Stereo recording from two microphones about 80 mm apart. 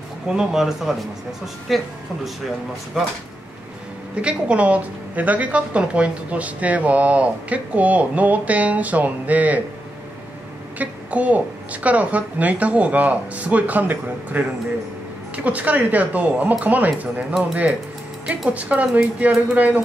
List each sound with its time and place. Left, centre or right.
0.3 s speech: centre
2.9 s speech: centre
4.1 s a woman's voice: centre
10.8 s a woman's voice: centre